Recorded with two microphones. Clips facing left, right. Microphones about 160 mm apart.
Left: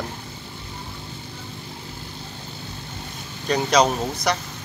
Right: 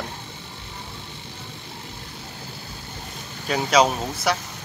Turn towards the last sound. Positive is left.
turn(degrees=-5)  # may be behind; listen again after turning